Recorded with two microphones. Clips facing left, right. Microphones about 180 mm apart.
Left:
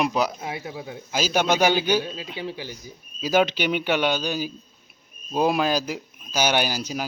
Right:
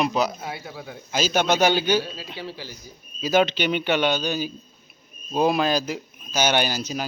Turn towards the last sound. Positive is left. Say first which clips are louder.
# right 1 dB
turn(degrees=10)  # may be behind; listen again after turning